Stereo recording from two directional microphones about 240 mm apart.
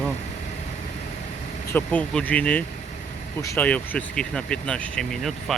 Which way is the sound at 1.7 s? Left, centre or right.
Centre.